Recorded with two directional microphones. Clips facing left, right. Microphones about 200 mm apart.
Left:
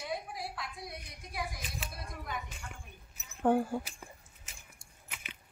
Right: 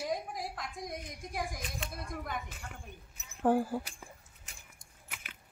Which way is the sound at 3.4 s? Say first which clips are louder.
Even; 5° right (ahead or behind).